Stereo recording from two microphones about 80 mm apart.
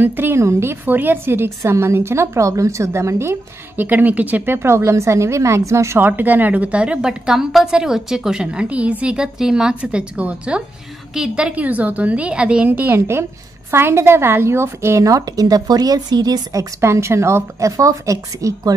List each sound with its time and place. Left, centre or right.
0.0 s a woman's voice: right
5.9 s a woman's voice: right
12.6 s a woman's voice: right
16.8 s a woman's voice: right